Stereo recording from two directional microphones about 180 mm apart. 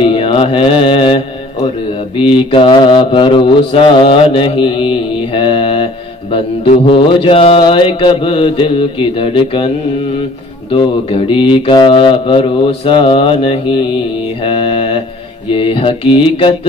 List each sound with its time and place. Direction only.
0.0 s mantra: 30° left (ahead or behind)
6.9 s mantra: 30° left (ahead or behind)
10.7 s mantra: 30° left (ahead or behind)